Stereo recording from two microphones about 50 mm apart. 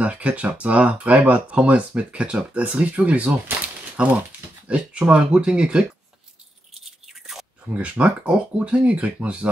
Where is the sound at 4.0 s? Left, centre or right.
Centre.